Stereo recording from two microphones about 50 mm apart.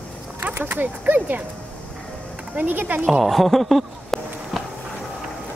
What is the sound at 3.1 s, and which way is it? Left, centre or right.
Speech, centre.